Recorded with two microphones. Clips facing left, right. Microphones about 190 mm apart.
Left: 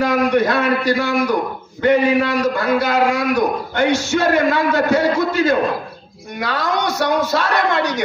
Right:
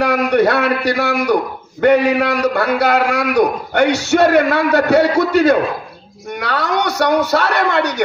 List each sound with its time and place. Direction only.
0.0 s a man's voice: 65° right (ahead or behind)